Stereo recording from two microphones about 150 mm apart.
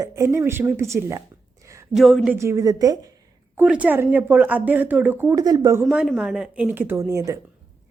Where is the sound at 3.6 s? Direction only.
10° right (ahead or behind).